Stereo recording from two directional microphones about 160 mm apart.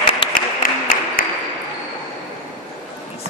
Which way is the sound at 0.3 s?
60° left (ahead or behind).